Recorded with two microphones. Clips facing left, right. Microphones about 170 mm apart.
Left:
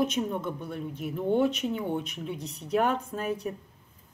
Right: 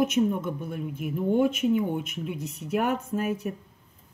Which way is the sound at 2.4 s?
5° right (ahead or behind).